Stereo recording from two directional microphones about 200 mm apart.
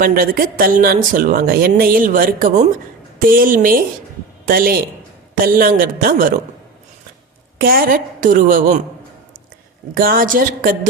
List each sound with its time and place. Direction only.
0.0 s speech: 45° right (ahead or behind)
7.6 s speech: 45° right (ahead or behind)
9.9 s speech: 45° right (ahead or behind)